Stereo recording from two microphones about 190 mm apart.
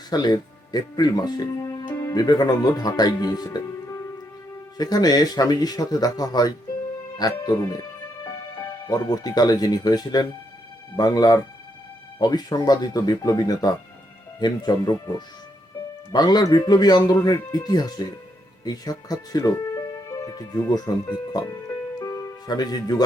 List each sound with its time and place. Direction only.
0.1 s speech: 20° left (ahead or behind)
16.1 s speech: 20° left (ahead or behind)